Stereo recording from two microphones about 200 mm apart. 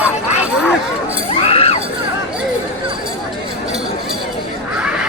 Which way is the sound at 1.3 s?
30° left (ahead or behind).